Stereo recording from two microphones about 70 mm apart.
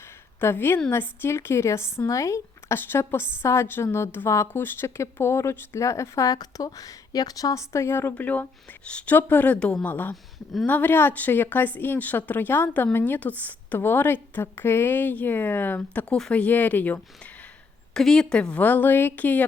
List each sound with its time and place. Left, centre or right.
0.3 s a woman's voice: left
8.1 s speech: left
16.0 s speech: centre
16.3 s speech: left
17.9 s speech: centre